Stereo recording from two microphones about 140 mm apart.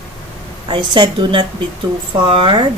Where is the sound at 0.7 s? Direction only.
35° right (ahead or behind).